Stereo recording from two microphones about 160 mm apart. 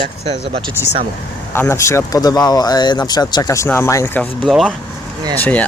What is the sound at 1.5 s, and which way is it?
Speech, 15° left (ahead or behind).